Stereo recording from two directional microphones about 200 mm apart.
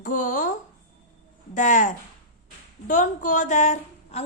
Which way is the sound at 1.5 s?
40° left (ahead or behind).